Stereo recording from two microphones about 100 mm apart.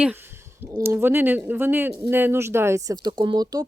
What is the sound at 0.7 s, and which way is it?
Speech, 35° right (ahead or behind).